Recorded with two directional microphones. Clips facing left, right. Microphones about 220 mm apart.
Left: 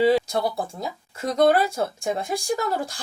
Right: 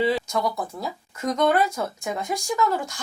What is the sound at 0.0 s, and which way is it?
Speech, 35° left (ahead or behind).